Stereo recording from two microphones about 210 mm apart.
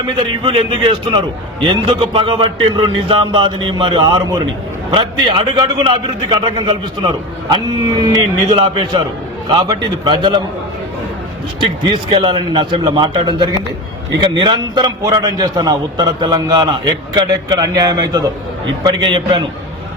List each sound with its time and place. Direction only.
0.4 s a man's voice: 25° right (ahead or behind)
11.6 s a man's voice: 20° right (ahead or behind)